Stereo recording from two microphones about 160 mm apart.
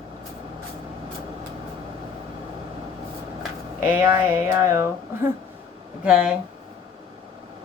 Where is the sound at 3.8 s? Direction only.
15° right (ahead or behind).